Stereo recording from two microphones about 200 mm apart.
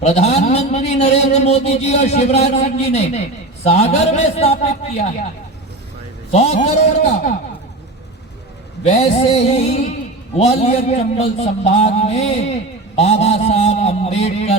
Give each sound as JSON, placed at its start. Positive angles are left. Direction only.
{"t": 0.0, "sound": "a man's voice", "side_deg": 35}
{"t": 6.3, "sound": "a man's voice", "side_deg": 35}
{"t": 8.9, "sound": "a man's voice", "side_deg": 35}
{"t": 13.0, "sound": "a sound", "side_deg": 30}